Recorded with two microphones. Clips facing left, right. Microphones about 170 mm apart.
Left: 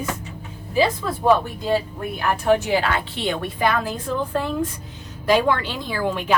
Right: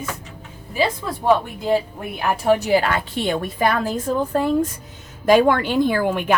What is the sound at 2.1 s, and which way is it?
A woman's voice, 35° right (ahead or behind).